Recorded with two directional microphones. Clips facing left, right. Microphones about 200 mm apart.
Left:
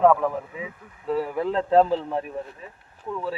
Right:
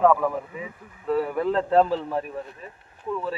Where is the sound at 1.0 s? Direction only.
20° left (ahead or behind).